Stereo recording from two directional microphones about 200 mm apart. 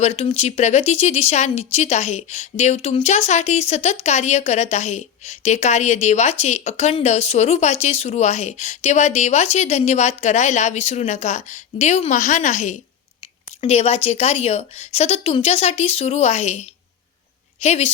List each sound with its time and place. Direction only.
0.0 s a woman's voice: 30° left (ahead or behind)